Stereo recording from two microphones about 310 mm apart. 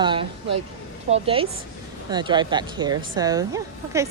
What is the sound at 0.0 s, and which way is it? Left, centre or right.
Speech, centre.